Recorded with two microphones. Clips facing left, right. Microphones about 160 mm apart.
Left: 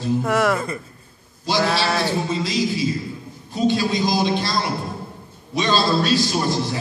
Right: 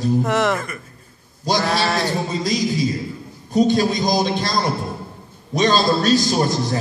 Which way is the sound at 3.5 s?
45° right (ahead or behind).